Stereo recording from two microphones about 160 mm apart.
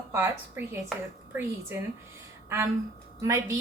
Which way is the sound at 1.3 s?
15° right (ahead or behind).